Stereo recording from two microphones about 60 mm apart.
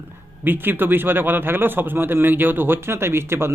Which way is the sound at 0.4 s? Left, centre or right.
Right.